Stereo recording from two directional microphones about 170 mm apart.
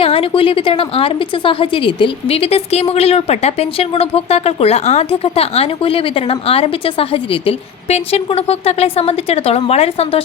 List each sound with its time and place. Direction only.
0.0 s a woman's voice: 35° left (ahead or behind)